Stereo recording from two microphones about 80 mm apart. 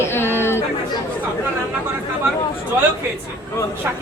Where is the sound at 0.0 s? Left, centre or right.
Left.